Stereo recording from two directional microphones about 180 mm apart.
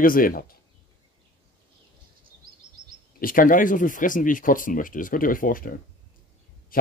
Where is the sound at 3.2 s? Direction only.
50° left (ahead or behind).